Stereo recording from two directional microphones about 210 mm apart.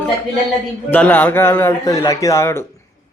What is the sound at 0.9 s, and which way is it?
A man's voice, 10° left (ahead or behind).